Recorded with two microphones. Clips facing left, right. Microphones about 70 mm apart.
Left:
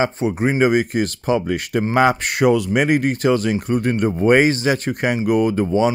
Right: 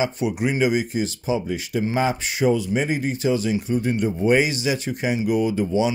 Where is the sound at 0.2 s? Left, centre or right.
Left.